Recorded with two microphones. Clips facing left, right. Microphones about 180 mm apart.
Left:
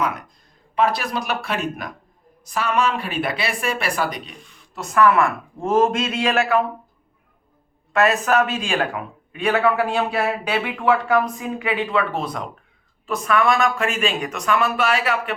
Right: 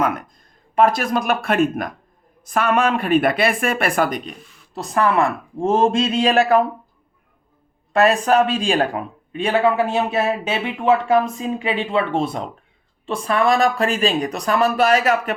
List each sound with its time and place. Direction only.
0.8 s speech: 45° right (ahead or behind)
4.7 s speech: 35° right (ahead or behind)
7.9 s speech: 35° right (ahead or behind)